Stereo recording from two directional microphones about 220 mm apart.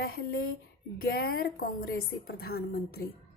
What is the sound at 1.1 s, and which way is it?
A woman's voice, 45° left (ahead or behind).